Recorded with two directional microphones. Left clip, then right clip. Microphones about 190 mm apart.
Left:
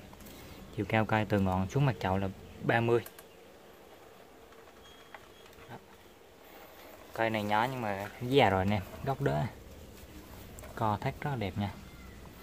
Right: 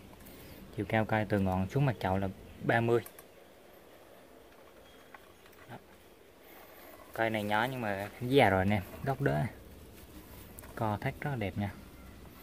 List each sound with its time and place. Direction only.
0.7 s speech: centre (ahead or behind)
7.2 s speech: 5° right (ahead or behind)
10.7 s speech: 5° right (ahead or behind)